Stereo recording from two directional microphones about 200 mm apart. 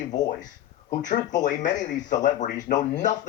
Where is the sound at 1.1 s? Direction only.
40° left (ahead or behind).